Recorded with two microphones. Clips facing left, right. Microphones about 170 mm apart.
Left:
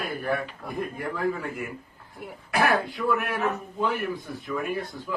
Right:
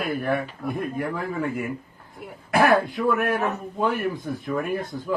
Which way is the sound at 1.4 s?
50° right (ahead or behind).